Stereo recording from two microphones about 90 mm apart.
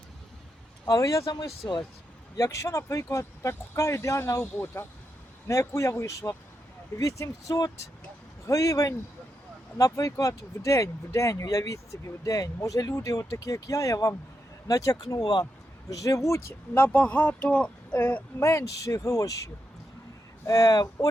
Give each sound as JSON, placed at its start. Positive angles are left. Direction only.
{"t": 0.9, "sound": "speech", "side_deg": 40}
{"t": 20.5, "sound": "speech", "side_deg": 45}